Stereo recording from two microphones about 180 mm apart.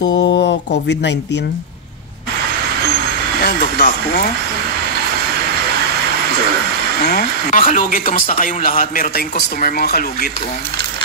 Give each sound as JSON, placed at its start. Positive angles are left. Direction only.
{"t": 0.4, "sound": "speech", "side_deg": 70}
{"t": 3.7, "sound": "speech", "side_deg": 50}
{"t": 7.1, "sound": "speech", "side_deg": 45}